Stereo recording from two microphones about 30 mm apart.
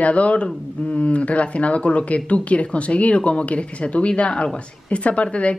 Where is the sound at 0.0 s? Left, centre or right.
Left.